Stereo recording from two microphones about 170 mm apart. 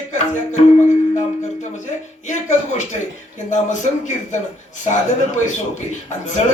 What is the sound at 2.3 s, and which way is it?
Music, 45° left (ahead or behind).